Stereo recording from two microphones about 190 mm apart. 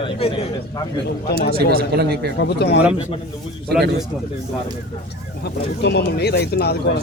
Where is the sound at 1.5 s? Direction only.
55° right (ahead or behind).